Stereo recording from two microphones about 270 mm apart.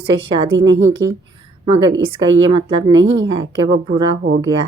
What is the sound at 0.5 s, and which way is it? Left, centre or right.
Speech, right.